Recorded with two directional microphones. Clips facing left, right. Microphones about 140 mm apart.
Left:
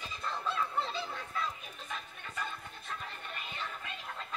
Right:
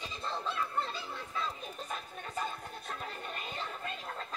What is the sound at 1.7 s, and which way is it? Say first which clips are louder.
Chatter: right 3 dB; 40° right (ahead or behind).